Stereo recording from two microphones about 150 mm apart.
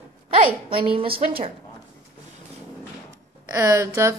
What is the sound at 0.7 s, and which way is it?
Speech, 35° right (ahead or behind).